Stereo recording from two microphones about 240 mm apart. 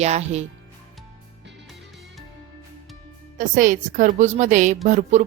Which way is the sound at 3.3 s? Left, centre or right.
Right.